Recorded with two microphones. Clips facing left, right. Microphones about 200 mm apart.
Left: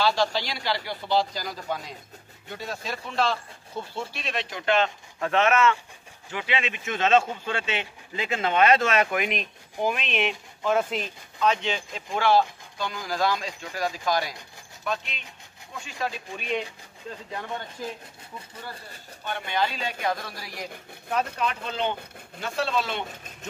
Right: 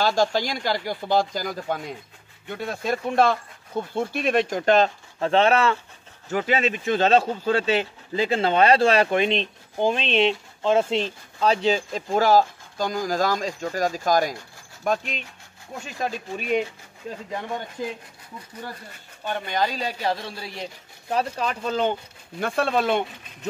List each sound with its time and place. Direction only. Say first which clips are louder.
0.0 s speech: right 3 dB; 45° right (ahead or behind)
17.8 s speech: right 5 dB; 20° right (ahead or behind)
19.2 s speech: right 3 dB; 40° right (ahead or behind)
22.4 s speech: right 5 dB; 55° right (ahead or behind)